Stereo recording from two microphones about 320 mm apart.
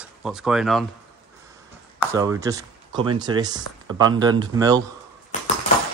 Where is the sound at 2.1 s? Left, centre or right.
Centre.